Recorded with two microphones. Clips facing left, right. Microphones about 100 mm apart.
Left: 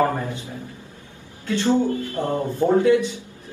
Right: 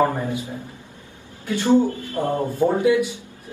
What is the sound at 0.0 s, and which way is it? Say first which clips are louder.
Speech: right 1 dB; 10° right (ahead or behind).